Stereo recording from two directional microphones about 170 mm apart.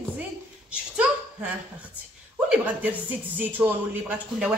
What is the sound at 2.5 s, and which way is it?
Speech, 10° right (ahead or behind).